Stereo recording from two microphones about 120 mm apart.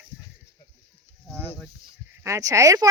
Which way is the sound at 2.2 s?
25° right (ahead or behind).